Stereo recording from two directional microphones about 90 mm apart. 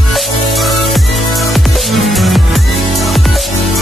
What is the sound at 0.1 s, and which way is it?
Music, centre (ahead or behind).